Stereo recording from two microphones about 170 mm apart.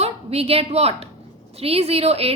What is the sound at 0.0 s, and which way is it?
A woman's voice, 35° right (ahead or behind).